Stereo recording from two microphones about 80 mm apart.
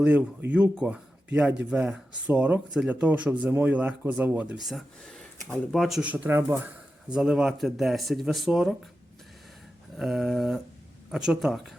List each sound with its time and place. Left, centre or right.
0.0 s speech: centre
4.5 s speech: centre
5.0 s a sound: centre
5.7 s speech: centre
6.0 s speech: centre
10.0 s speech: centre